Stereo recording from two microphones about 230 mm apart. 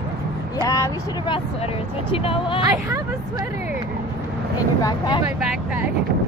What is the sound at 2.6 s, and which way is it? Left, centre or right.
Speech, centre.